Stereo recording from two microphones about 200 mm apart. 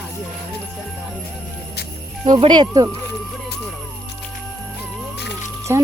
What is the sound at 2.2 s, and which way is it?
Speech, 20° right (ahead or behind).